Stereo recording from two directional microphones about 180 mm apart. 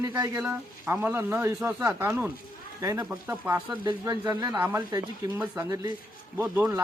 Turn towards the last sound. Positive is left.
turn(degrees=-15)  # may be behind; listen again after turning